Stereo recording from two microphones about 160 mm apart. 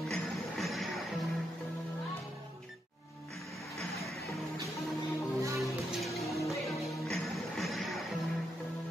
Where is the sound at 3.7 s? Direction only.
Centre (ahead or behind).